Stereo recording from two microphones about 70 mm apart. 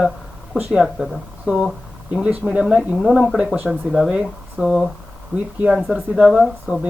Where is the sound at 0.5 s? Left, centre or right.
Centre.